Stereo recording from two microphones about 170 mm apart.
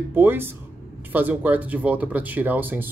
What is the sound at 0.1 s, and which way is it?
Speech, 10° right (ahead or behind).